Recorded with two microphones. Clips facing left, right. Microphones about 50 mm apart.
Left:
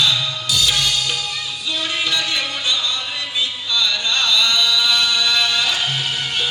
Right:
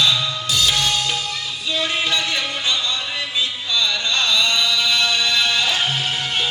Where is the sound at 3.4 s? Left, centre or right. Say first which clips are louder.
Left 2 dB; right.